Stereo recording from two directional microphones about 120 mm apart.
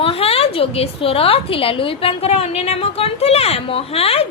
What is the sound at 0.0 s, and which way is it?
A woman's voice, 55° left (ahead or behind).